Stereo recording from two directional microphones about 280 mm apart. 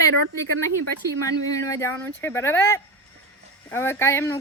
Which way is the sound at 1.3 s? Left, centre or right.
Centre.